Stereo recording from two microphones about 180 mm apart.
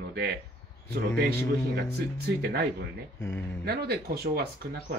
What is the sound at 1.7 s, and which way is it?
Speech, 65° right (ahead or behind).